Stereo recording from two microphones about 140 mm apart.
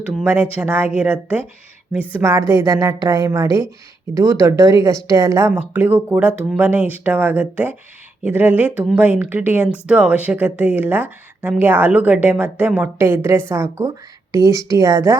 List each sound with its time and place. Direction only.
0.6 s speech: 10° right (ahead or behind)
2.2 s a woman's voice: 20° right (ahead or behind)